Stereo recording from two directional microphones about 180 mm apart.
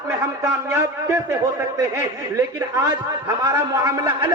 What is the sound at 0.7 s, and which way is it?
A man's voice, 15° right (ahead or behind).